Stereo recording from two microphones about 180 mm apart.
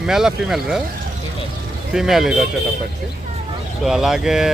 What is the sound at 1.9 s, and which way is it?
Speech, centre (ahead or behind).